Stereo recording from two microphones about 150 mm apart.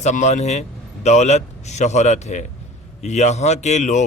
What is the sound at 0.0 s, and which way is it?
Speech, 50° left (ahead or behind).